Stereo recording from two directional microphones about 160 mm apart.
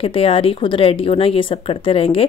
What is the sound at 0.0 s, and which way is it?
A woman's voice, 35° left (ahead or behind).